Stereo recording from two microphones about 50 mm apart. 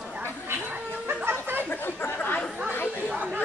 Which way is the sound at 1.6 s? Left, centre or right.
Left.